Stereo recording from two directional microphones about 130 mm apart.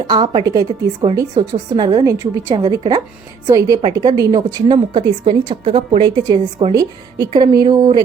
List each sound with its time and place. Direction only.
0.1 s a woman's voice: 35° right (ahead or behind)